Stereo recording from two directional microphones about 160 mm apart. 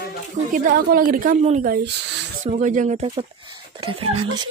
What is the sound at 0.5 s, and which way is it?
Speech, 55° right (ahead or behind).